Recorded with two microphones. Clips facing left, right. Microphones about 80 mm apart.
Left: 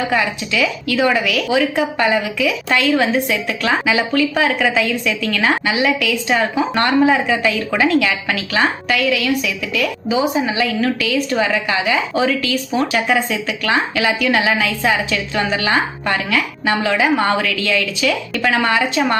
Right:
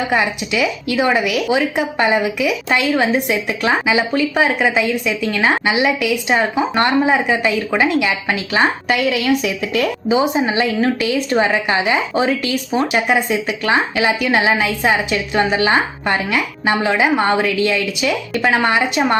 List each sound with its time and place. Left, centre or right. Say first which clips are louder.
0.1 s a woman's voice: right 1 dB; right
8.3 s a woman's voice: right 1 dB; right